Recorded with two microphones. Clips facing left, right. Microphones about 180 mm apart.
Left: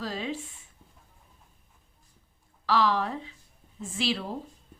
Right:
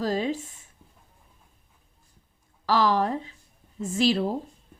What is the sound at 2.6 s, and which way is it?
A woman's voice, 45° right (ahead or behind).